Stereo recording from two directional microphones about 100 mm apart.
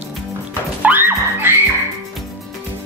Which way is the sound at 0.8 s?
20° right (ahead or behind).